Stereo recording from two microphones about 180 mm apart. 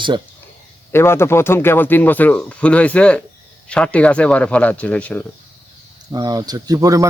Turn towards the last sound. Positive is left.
turn(degrees=-20)  # may be behind; listen again after turning